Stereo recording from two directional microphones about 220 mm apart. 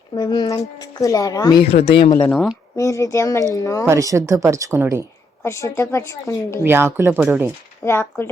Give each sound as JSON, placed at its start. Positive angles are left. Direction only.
{"t": 0.2, "sound": "speech", "side_deg": 20}
{"t": 2.1, "sound": "speech", "side_deg": 5}
{"t": 2.7, "sound": "a woman's voice", "side_deg": 15}
{"t": 3.8, "sound": "speech", "side_deg": -15}
{"t": 5.4, "sound": "a woman's voice", "side_deg": 15}
{"t": 6.7, "sound": "speech", "side_deg": -10}
{"t": 7.9, "sound": "a woman's voice", "side_deg": 10}